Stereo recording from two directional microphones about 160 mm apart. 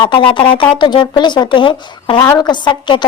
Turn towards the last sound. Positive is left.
turn(degrees=30)  # may be behind; listen again after turning